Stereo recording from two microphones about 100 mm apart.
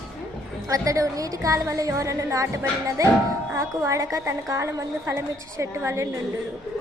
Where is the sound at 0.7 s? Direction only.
35° right (ahead or behind).